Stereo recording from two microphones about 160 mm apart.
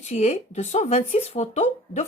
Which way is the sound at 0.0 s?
45° left (ahead or behind).